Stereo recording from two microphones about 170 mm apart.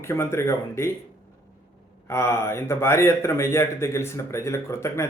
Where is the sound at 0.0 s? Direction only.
15° left (ahead or behind).